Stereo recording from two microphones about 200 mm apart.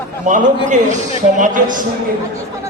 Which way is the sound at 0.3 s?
40° right (ahead or behind).